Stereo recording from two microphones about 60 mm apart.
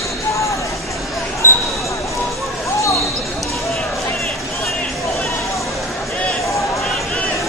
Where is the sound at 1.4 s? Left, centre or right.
Left.